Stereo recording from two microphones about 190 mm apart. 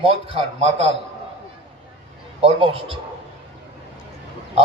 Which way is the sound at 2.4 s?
30° right (ahead or behind).